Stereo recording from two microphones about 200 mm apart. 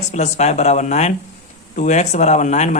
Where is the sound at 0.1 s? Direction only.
35° left (ahead or behind).